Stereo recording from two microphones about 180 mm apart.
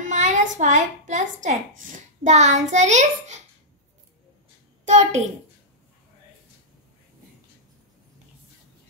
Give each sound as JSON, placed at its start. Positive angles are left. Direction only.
{"t": 0.0, "sound": "a child's voice", "side_deg": -40}
{"t": 4.8, "sound": "a child's voice", "side_deg": -40}